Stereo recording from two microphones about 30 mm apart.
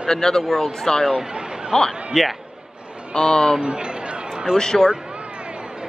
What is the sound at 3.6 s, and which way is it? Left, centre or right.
Speech, right.